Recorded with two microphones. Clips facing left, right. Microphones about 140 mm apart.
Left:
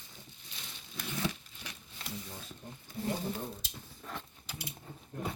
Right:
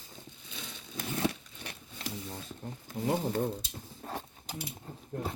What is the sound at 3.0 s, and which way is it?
Speech, 90° right.